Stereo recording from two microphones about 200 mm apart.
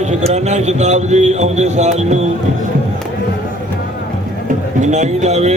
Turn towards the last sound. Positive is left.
turn(degrees=-35)  # may be behind; listen again after turning